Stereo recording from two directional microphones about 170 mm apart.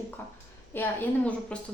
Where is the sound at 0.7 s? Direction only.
10° left (ahead or behind).